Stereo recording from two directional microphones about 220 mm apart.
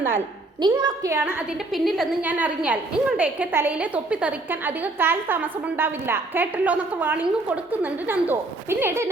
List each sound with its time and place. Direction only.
0.6 s a woman's voice: 20° right (ahead or behind)
1.2 s a woman's voice: centre (ahead or behind)